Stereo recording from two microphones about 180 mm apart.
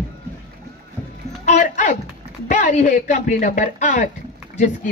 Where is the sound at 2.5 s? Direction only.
45° left (ahead or behind).